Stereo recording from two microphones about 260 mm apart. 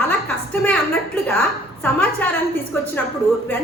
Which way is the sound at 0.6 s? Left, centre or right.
Centre.